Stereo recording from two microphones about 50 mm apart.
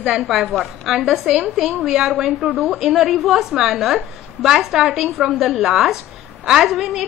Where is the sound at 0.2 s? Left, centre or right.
Centre.